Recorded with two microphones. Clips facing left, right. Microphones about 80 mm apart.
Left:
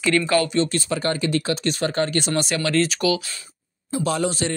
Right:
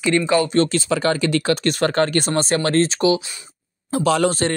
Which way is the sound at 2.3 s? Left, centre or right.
Right.